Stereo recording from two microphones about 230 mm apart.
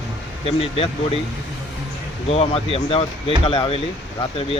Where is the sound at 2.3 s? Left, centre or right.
Left.